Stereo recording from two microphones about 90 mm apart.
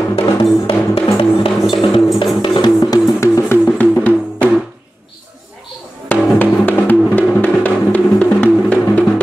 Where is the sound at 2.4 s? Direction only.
55° left (ahead or behind).